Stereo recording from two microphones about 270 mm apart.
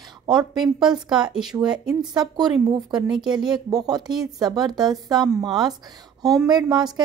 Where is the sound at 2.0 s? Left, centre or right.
Centre.